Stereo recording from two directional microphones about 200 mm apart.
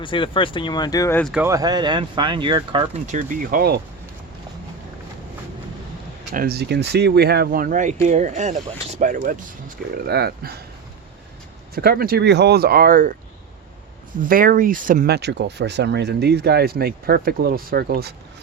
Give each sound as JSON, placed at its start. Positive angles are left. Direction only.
{"t": 0.0, "sound": "speech", "side_deg": 25}
{"t": 1.2, "sound": "speech", "side_deg": -5}
{"t": 1.5, "sound": "speech", "side_deg": -20}
{"t": 6.3, "sound": "speech", "side_deg": -50}
{"t": 11.7, "sound": "speech", "side_deg": -50}
{"t": 14.2, "sound": "speech", "side_deg": -45}